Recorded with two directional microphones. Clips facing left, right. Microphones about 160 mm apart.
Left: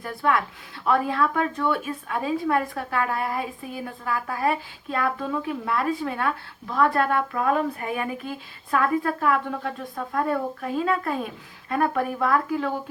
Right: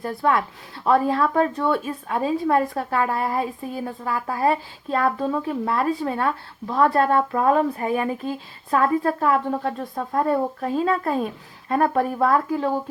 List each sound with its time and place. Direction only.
0.0 s speech: 30° right (ahead or behind)